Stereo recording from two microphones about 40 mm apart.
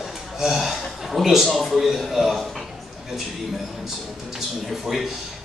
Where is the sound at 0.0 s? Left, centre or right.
Centre.